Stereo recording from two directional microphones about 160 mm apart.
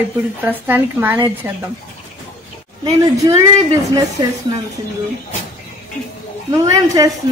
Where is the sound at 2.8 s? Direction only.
25° right (ahead or behind).